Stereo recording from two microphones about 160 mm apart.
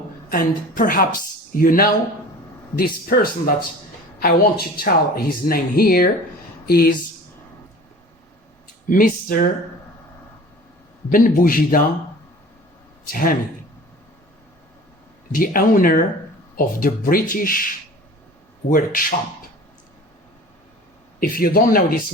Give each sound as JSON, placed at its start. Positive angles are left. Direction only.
{"t": 0.3, "sound": "speech", "side_deg": 65}
{"t": 8.9, "sound": "speech", "side_deg": 60}
{"t": 11.1, "sound": "speech", "side_deg": 60}
{"t": 13.1, "sound": "speech", "side_deg": 65}
{"t": 15.3, "sound": "speech", "side_deg": 60}
{"t": 18.7, "sound": "speech", "side_deg": 60}
{"t": 21.2, "sound": "speech", "side_deg": 65}